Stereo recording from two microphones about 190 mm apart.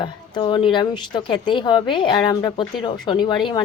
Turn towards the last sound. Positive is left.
turn(degrees=25)  # may be behind; listen again after turning